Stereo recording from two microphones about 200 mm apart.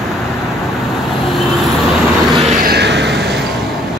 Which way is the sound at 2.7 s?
55° right (ahead or behind).